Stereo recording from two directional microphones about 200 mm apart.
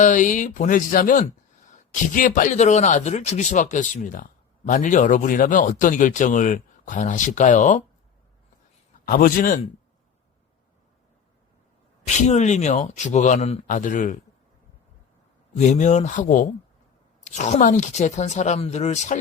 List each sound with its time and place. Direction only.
0.0 s speech: 40° left (ahead or behind)
9.0 s a man's voice: 45° left (ahead or behind)
12.2 s speech: 35° left (ahead or behind)
15.5 s speech: 35° left (ahead or behind)